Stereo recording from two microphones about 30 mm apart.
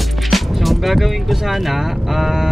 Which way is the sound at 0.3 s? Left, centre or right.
Centre.